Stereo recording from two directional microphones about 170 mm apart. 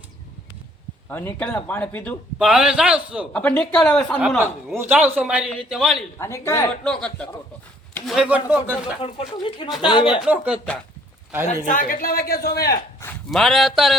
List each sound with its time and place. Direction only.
1.1 s speech: 10° left (ahead or behind)
2.4 s a man's voice: 5° right (ahead or behind)
3.3 s a man's voice: 5° left (ahead or behind)
6.1 s speech: 15° left (ahead or behind)
6.8 s a man's voice: 5° left (ahead or behind)
9.0 s speech: 35° left (ahead or behind)
10.2 s a man's voice: 5° right (ahead or behind)
11.4 s a man's voice: 50° left (ahead or behind); by 12.8 s 70° left (ahead or behind)
13.3 s a man's voice: centre (ahead or behind)